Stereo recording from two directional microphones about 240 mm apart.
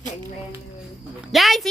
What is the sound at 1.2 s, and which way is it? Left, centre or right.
Speech, centre.